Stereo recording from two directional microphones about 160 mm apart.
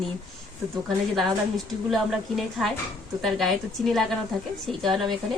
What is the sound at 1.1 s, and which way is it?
A woman's voice, centre (ahead or behind).